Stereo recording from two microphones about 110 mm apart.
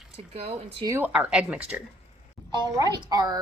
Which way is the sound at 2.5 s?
40° right (ahead or behind).